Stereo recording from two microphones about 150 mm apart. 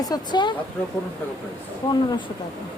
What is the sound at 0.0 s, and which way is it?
Speech, 25° left (ahead or behind).